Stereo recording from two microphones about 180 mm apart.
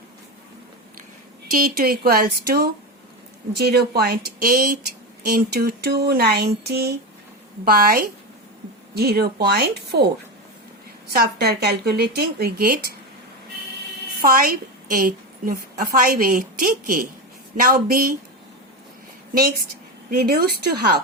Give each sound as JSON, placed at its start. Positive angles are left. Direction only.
{"t": 1.5, "sound": "speech", "side_deg": -55}
{"t": 11.1, "sound": "speech", "side_deg": -60}
{"t": 14.2, "sound": "a woman's voice", "side_deg": -55}
{"t": 20.1, "sound": "speech", "side_deg": -55}